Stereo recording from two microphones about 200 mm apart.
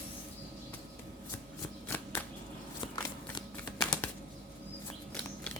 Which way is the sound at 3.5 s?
10° left (ahead or behind).